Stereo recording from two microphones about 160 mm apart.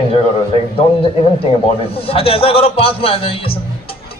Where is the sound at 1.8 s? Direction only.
35° left (ahead or behind).